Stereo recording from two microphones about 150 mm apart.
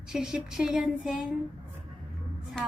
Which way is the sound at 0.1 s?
5° right (ahead or behind).